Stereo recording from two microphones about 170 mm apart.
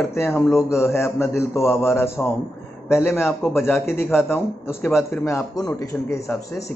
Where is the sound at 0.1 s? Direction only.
15° left (ahead or behind).